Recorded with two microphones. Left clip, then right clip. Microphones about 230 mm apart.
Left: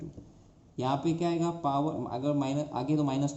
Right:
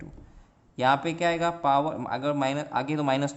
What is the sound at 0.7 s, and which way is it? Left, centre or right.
Speech, right.